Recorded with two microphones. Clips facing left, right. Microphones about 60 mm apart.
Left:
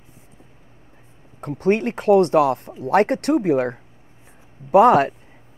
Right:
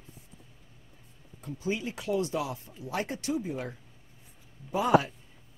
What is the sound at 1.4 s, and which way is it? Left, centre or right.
Speech, left.